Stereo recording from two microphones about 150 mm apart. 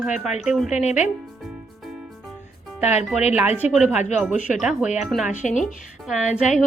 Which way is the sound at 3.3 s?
10° right (ahead or behind).